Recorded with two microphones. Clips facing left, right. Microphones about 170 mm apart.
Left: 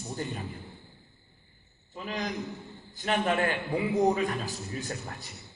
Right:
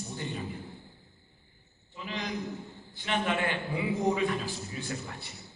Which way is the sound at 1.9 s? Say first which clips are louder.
Left 3 dB; 45° left (ahead or behind).